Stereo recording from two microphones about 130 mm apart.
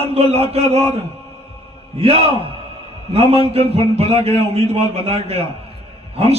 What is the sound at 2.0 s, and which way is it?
A man's voice, 50° right (ahead or behind).